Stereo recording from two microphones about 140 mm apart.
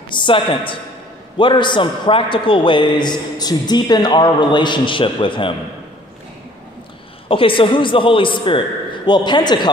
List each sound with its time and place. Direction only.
0.1 s a man's voice: 35° left (ahead or behind)
7.2 s a man's voice: 40° left (ahead or behind)